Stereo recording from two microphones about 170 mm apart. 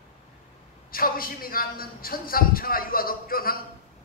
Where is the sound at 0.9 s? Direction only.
60° left (ahead or behind).